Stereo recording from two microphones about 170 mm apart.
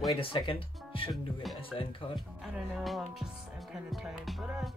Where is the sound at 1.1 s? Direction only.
Centre (ahead or behind).